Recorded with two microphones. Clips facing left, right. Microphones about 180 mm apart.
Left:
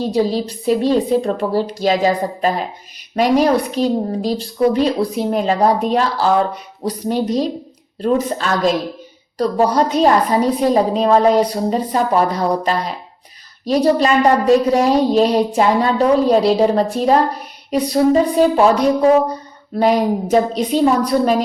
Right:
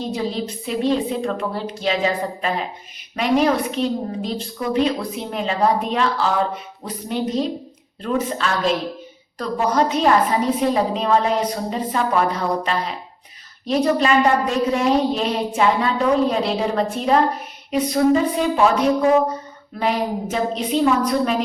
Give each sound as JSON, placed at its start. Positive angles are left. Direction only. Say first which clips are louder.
{"t": 0.0, "sound": "a woman's voice", "louder": "left 7 dB", "side_deg": 35}